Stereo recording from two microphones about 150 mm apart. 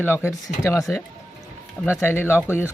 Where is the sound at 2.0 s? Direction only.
15° left (ahead or behind).